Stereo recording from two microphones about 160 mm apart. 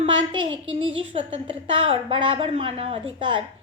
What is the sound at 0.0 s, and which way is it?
A woman's voice, 30° right (ahead or behind).